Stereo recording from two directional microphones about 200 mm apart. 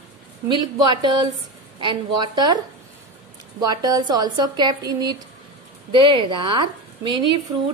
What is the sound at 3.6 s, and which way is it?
A woman's voice, 20° right (ahead or behind).